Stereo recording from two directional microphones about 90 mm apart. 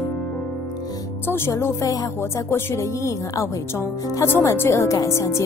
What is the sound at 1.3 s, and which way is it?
Speech, 25° left (ahead or behind).